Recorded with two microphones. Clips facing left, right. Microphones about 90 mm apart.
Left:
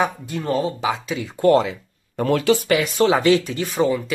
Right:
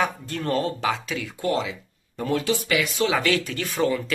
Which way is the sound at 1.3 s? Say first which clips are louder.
Left 10 dB; 45° left (ahead or behind).